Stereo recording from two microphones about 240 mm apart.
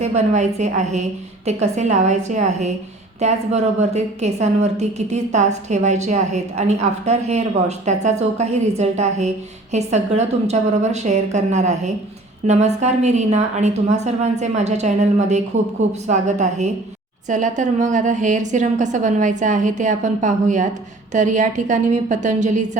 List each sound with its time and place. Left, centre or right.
0.0 s a woman's voice: right